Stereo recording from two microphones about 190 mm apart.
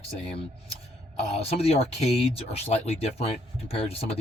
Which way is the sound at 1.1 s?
35° left (ahead or behind).